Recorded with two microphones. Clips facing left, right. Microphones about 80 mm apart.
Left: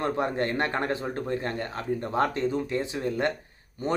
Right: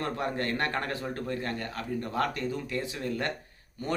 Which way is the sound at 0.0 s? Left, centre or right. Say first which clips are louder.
Left 4 dB; left.